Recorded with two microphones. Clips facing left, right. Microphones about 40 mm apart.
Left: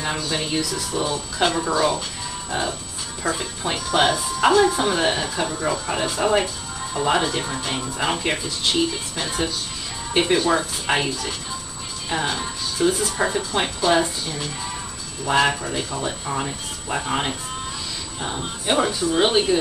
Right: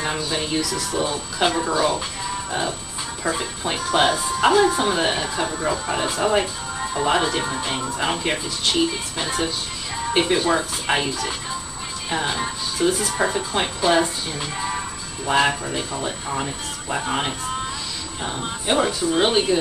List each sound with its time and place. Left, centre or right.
0.2 s speech: centre
2.5 s speech: centre
3.3 s speech: centre
12.4 s music: centre
12.8 s speech: centre
14.4 s speech: centre
15.2 s speech: centre